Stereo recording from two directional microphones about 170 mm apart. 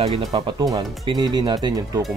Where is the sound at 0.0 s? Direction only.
30° right (ahead or behind).